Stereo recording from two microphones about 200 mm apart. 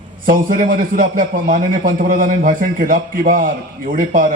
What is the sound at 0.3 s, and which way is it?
A man's voice, 45° right (ahead or behind).